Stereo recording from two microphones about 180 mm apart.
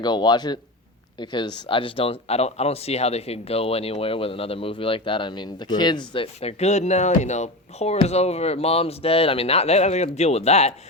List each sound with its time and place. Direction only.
0.0 s speech: 25° left (ahead or behind)